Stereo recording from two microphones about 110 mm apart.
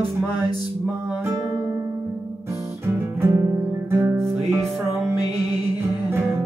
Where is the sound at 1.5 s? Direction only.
35° right (ahead or behind).